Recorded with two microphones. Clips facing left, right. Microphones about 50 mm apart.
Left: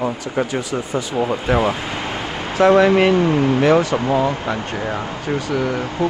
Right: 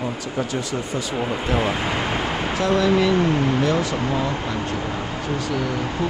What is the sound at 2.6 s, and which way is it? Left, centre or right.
Speech, left.